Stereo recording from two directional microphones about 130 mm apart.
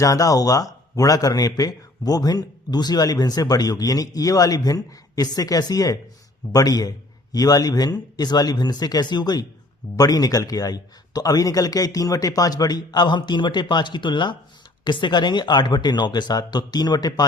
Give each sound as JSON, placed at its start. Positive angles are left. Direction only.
{"t": 0.0, "sound": "a man's voice", "side_deg": 25}